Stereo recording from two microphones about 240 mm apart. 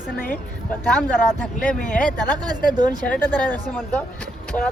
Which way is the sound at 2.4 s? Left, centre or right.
Centre.